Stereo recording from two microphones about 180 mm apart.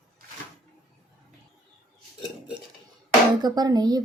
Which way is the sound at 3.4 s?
20° right (ahead or behind).